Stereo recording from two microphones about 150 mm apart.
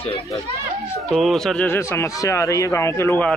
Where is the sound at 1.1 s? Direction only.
Centre (ahead or behind).